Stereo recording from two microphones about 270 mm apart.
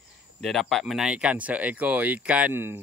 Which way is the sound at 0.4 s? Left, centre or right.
Centre.